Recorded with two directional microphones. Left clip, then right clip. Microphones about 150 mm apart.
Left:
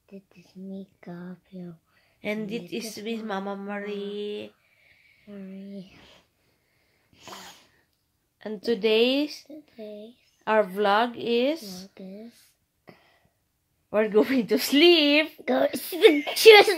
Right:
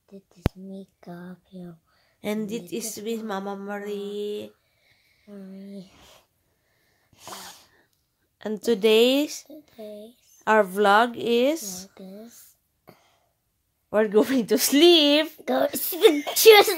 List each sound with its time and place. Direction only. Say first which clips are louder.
0.1 s speech: right 15 dB; 15° right (ahead or behind)
2.2 s speech: right 1 dB; 40° right (ahead or behind)
5.2 s speech: even; 15° right (ahead or behind)
5.8 s a sound: even; 20° right (ahead or behind)
7.2 s sneeze: right 3 dB; 30° right (ahead or behind)
8.4 s speech: right 3 dB; 50° right (ahead or behind)
9.5 s speech: right 1 dB; 20° right (ahead or behind)
10.4 s speech: right 3 dB; 45° right (ahead or behind)
11.9 s speech: even; 15° right (ahead or behind)
12.8 s a sound: left 1 dB; 5° right (ahead or behind)
13.8 s speech: right 1 dB; 35° right (ahead or behind)
15.4 s speech: even; 15° right (ahead or behind)